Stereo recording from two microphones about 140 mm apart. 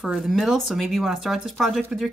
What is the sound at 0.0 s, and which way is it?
Speech, 5° right (ahead or behind).